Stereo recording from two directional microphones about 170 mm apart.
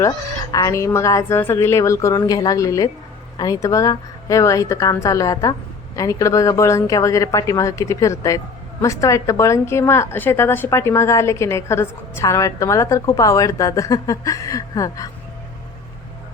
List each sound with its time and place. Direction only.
0.5 s a woman's voice: 15° left (ahead or behind)